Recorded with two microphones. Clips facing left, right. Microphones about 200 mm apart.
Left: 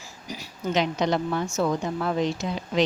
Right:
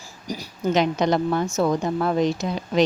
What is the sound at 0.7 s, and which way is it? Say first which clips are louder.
A woman's voice: right 4 dB; 45° right (ahead or behind).